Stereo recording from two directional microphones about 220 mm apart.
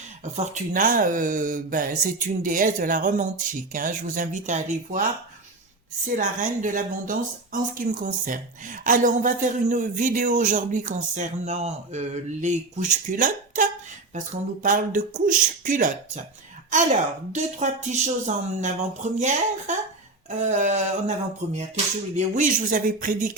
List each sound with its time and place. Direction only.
0.3 s speech: 35° right (ahead or behind)
6.1 s speech: 35° right (ahead or behind)